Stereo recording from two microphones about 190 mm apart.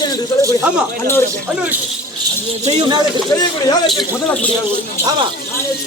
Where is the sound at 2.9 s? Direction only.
20° right (ahead or behind).